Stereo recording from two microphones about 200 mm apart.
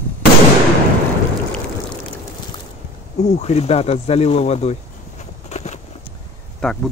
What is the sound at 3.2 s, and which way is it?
Speech, 35° left (ahead or behind).